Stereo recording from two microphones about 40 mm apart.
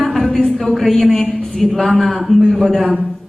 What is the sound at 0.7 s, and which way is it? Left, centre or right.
A woman's voice, centre.